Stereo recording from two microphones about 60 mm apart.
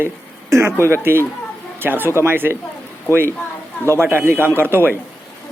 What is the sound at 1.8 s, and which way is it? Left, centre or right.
Speech, right.